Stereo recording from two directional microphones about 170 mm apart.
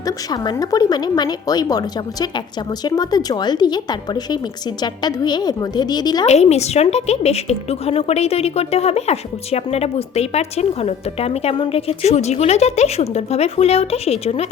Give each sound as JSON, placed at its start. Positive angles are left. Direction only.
{"t": 0.0, "sound": "speech", "side_deg": 20}
{"t": 6.2, "sound": "a woman's voice", "side_deg": 40}